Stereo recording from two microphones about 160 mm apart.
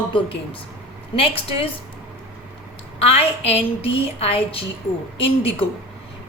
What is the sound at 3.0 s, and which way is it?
A woman's voice, 40° left (ahead or behind).